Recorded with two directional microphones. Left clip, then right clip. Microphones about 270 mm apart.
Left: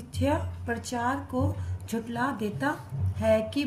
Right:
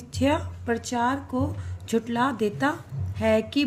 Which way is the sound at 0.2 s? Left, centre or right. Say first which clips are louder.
Right 4 dB; right.